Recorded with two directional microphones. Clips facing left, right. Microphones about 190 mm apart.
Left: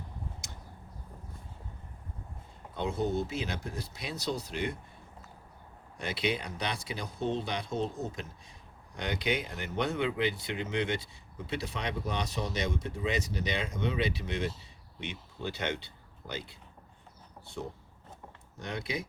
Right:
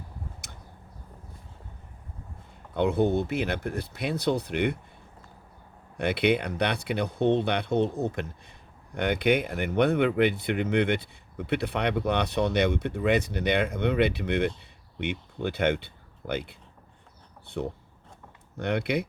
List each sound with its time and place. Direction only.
0.4 s a sound: 60° right (ahead or behind)
2.7 s speech: 60° right (ahead or behind)
6.0 s speech: 60° right (ahead or behind)